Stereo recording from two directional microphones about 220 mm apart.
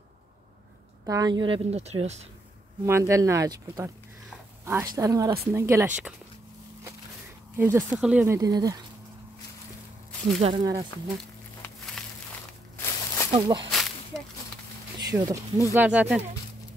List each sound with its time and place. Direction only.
1.0 s speech: 15° right (ahead or behind)
2.8 s speech: 15° right (ahead or behind)
7.5 s speech: 10° right (ahead or behind)
10.4 s speech: 20° right (ahead or behind)
11.1 s a sound: 5° left (ahead or behind)
12.7 s walk: 10° left (ahead or behind)
13.3 s speech: 20° right (ahead or behind)
13.7 s snake: centre (ahead or behind)
15.0 s speech: 15° right (ahead or behind)